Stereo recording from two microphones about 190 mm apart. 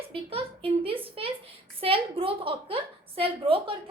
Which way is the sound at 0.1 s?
30° right (ahead or behind).